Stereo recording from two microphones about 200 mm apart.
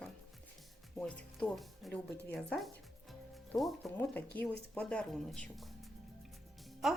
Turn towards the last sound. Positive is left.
turn(degrees=0)  # may be behind; listen again after turning